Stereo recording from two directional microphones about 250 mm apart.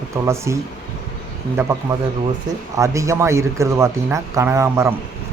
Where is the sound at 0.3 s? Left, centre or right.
Centre.